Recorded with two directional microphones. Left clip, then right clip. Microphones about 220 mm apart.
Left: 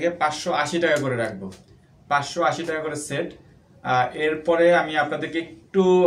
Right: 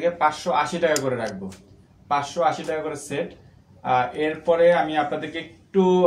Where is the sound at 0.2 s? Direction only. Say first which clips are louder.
Right 2 dB; 15° left (ahead or behind).